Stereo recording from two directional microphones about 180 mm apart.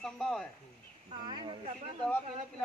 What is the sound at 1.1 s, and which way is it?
Speech, 25° right (ahead or behind).